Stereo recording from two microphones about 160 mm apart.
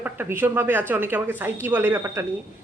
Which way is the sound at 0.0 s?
15° right (ahead or behind).